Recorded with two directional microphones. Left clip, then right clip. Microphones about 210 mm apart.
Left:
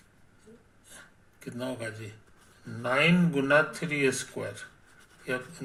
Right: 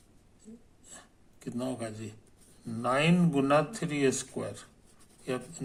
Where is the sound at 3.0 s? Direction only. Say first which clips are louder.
Left 4 dB; 25° right (ahead or behind).